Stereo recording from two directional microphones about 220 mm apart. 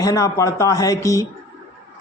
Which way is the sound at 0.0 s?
15° left (ahead or behind).